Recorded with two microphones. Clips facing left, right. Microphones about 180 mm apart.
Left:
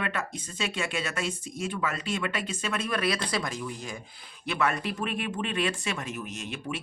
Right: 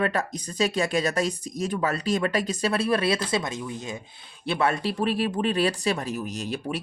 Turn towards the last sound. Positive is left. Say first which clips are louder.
# right 5 dB
turn(degrees=-35)  # may be behind; listen again after turning